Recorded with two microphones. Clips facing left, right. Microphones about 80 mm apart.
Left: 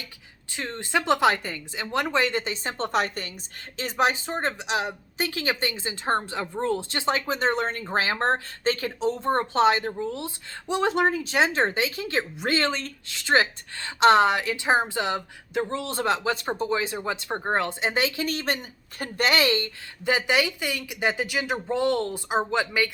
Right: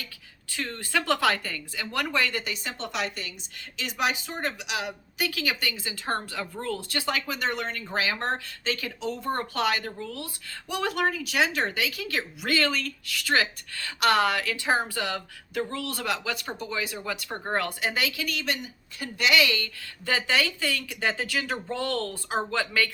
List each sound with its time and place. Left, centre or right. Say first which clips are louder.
0.5 s speech: left 2 dB; left